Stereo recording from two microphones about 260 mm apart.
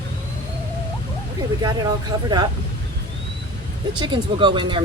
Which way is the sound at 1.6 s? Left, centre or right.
Centre.